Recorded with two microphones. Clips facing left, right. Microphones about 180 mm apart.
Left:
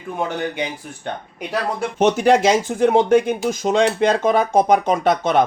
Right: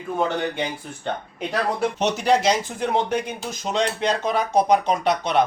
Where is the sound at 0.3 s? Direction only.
15° left (ahead or behind).